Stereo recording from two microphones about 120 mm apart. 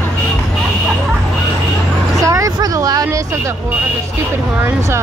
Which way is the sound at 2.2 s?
30° right (ahead or behind).